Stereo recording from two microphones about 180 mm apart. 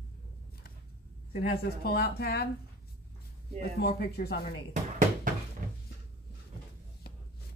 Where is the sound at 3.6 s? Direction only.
60° left (ahead or behind).